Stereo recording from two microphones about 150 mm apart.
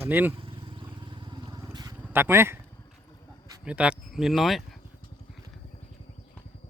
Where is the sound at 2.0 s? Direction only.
15° right (ahead or behind).